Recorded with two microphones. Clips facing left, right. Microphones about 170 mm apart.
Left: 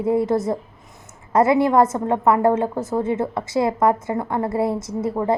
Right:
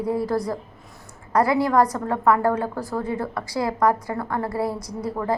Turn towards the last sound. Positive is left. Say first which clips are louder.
# left 5 dB
turn(degrees=25)  # may be behind; listen again after turning